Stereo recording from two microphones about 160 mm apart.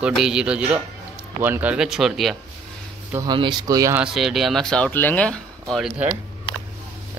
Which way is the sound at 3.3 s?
30° right (ahead or behind).